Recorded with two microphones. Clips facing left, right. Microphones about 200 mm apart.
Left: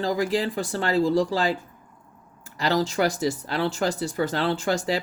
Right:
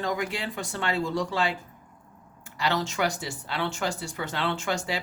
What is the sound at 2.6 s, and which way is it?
Speech, 35° left (ahead or behind).